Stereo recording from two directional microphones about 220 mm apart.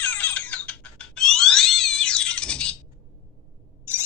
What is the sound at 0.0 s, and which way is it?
Cat, 5° left (ahead or behind).